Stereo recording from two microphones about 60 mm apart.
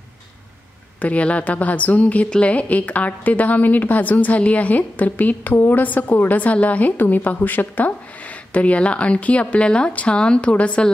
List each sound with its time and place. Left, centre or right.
1.0 s a woman's voice: left